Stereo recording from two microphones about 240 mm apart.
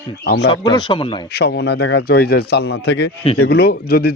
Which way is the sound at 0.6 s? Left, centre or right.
Centre.